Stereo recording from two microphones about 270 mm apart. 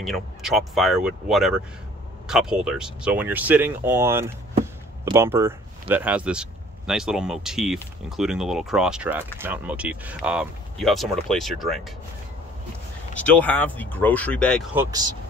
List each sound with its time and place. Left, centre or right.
0.0 s speech: centre
13.2 s speech: centre
14.7 s speech: centre